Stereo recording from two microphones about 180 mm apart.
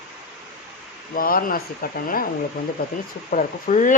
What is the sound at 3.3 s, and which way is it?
Speech, 45° left (ahead or behind).